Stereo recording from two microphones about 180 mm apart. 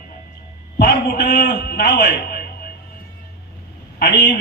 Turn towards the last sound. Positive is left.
turn(degrees=70)  # may be behind; listen again after turning